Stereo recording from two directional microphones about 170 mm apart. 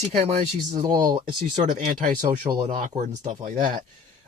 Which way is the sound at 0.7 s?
25° right (ahead or behind).